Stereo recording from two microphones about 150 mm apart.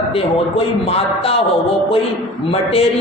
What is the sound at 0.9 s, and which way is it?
Speech, 40° left (ahead or behind).